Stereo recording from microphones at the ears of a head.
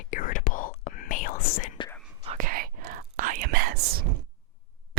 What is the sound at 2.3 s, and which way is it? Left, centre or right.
Whispering, right.